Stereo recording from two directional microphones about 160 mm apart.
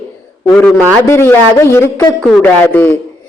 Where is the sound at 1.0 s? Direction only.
20° left (ahead or behind).